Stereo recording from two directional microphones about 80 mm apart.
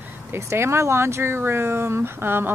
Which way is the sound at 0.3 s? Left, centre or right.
Right.